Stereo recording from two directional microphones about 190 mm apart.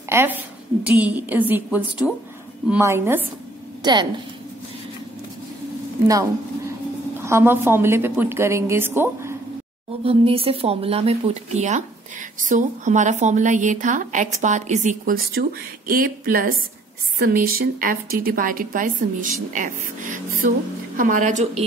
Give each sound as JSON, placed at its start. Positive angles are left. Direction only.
{"t": 0.1, "sound": "a woman's voice", "side_deg": -10}
{"t": 3.8, "sound": "a woman's voice", "side_deg": -25}
{"t": 7.2, "sound": "a woman's voice", "side_deg": -15}
{"t": 10.0, "sound": "a woman's voice", "side_deg": -30}